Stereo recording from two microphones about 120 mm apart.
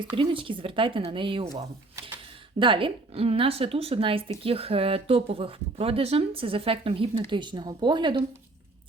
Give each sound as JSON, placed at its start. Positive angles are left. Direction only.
{"t": 0.0, "sound": "speech", "side_deg": -40}
{"t": 2.6, "sound": "speech", "side_deg": -45}